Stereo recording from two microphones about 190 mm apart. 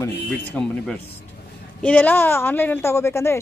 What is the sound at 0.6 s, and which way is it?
Speech, 5° left (ahead or behind).